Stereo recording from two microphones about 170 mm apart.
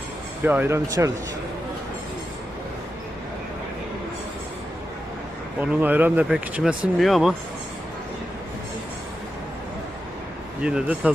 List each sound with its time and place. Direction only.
0.4 s speech: 10° right (ahead or behind)
5.5 s speech: 10° right (ahead or behind)
10.6 s speech: 5° right (ahead or behind)